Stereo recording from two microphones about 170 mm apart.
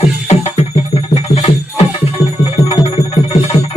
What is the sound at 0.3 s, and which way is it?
Music, 40° left (ahead or behind).